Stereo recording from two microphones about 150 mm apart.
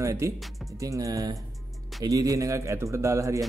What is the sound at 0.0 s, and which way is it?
Speech, 20° right (ahead or behind).